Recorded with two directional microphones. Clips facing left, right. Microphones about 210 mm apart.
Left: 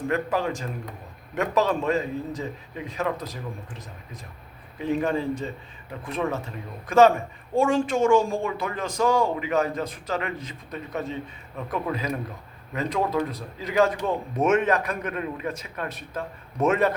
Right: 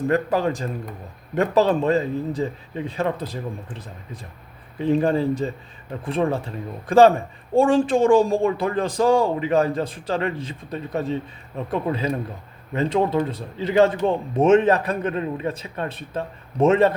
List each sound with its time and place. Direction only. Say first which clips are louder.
0.1 s speech: right 4 dB; 35° right (ahead or behind)